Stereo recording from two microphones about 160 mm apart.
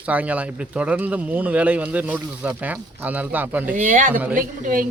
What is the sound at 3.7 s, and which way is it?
A woman's voice, 55° right (ahead or behind).